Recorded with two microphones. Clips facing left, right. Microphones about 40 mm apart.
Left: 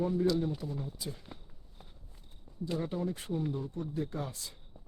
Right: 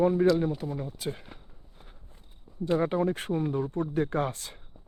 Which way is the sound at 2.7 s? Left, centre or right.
Right.